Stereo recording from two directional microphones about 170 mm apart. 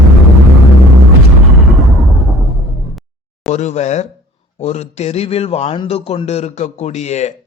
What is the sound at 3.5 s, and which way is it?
A man's voice, 40° left (ahead or behind).